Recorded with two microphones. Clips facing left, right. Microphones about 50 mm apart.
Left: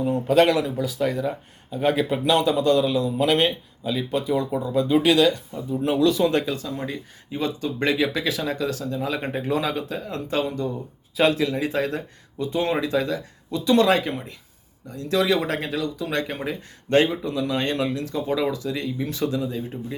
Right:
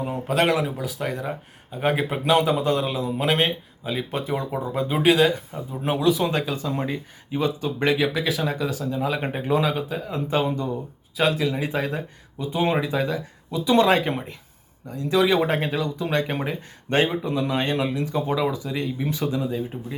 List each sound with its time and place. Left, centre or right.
0.1 s speech: centre
1.8 s speech: centre
3.9 s speech: right
6.0 s speech: centre
6.7 s speech: right
7.3 s speech: centre
10.2 s speech: right
11.2 s speech: centre; by 19.5 s right
19.5 s speech: centre